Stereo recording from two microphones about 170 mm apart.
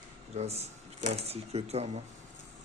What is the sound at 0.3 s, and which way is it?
Speech, 40° right (ahead or behind).